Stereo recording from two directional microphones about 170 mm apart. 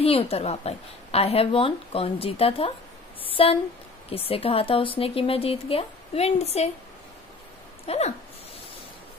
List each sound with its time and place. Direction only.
0.0 s a woman's voice: 35° left (ahead or behind)
7.8 s speech: 35° left (ahead or behind)